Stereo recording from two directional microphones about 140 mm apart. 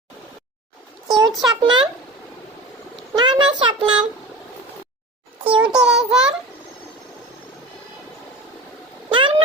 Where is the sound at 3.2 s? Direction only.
35° right (ahead or behind).